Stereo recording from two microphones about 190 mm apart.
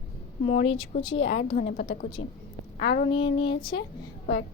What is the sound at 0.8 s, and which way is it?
Speech, 30° left (ahead or behind).